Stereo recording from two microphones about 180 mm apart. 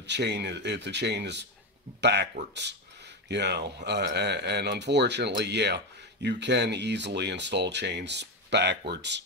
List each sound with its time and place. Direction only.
0.0 s speech: 75° right (ahead or behind)